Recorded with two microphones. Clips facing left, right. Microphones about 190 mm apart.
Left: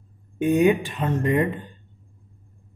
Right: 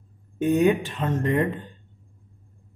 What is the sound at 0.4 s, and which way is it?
Speech, 10° left (ahead or behind).